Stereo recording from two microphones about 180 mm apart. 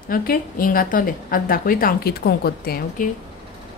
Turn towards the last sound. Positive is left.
turn(degrees=60)  # may be behind; listen again after turning